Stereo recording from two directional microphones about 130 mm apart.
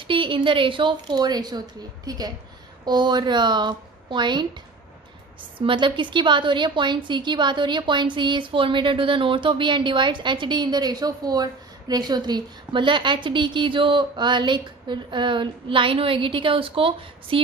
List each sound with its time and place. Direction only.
0.0 s a woman's voice: 40° right (ahead or behind)